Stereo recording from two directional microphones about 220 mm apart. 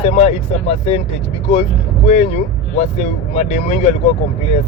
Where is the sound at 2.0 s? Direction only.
30° left (ahead or behind).